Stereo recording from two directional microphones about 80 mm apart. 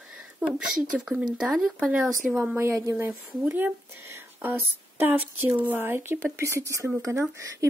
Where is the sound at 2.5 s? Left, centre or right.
Right.